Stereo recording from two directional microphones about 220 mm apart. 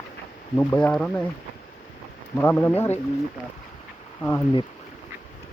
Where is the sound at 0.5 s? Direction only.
5° left (ahead or behind).